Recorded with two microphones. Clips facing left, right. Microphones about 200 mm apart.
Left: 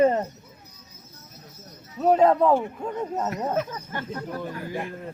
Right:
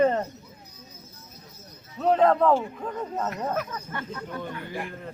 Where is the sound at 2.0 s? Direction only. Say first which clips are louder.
Left 2 dB; 10° left (ahead or behind).